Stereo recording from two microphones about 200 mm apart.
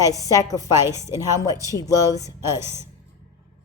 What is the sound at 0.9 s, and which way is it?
Speech, 15° right (ahead or behind).